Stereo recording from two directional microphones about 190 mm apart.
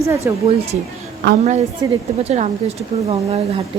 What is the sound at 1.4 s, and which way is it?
Speech, 35° right (ahead or behind).